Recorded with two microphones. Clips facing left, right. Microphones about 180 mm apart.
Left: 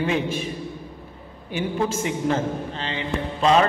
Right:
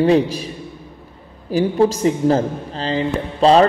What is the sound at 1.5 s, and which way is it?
A man's voice, 35° right (ahead or behind).